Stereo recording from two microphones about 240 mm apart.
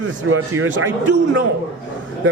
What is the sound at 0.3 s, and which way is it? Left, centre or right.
Speech, right.